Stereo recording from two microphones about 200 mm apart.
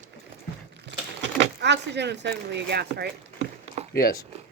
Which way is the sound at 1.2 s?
60° right (ahead or behind).